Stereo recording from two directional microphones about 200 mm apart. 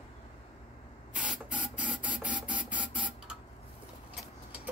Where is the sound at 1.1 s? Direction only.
5° right (ahead or behind).